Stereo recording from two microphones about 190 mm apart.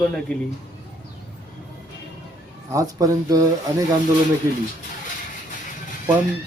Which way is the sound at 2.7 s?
20° right (ahead or behind).